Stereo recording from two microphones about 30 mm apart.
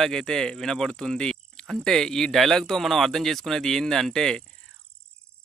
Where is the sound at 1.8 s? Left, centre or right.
Centre.